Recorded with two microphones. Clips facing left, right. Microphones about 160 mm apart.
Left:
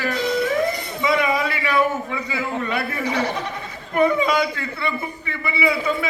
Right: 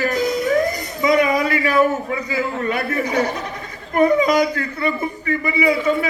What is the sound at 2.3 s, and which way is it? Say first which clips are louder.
Speech: right 3 dB; 45° right (ahead or behind).